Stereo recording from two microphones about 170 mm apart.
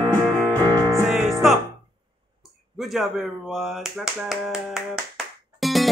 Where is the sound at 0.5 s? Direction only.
20° right (ahead or behind).